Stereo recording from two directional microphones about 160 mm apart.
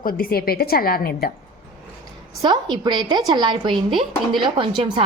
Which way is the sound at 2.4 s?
25° right (ahead or behind).